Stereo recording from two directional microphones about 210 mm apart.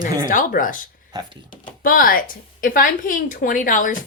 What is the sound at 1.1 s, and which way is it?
Speech, 20° right (ahead or behind).